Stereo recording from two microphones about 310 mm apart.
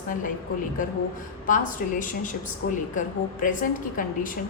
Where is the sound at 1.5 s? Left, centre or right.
Left.